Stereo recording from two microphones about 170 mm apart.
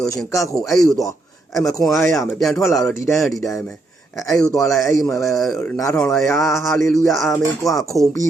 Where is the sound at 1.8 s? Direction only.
Centre (ahead or behind).